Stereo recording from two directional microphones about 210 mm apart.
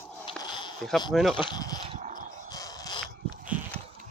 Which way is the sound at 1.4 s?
20° left (ahead or behind).